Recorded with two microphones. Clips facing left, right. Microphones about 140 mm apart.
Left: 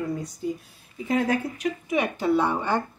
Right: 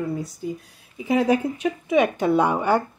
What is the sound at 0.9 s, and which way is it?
A woman's voice, 10° right (ahead or behind).